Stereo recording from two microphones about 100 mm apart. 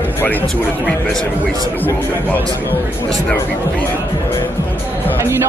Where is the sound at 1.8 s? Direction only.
20° left (ahead or behind).